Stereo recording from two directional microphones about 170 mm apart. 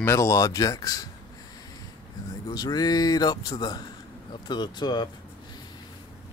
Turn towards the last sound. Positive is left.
turn(degrees=25)  # may be behind; listen again after turning